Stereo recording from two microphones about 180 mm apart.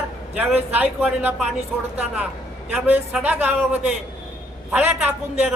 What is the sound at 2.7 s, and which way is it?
Speech, 5° right (ahead or behind).